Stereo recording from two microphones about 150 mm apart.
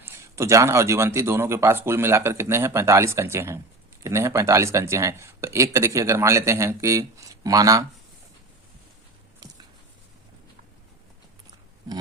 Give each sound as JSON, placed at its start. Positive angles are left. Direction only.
{"t": 0.0, "sound": "speech", "side_deg": -15}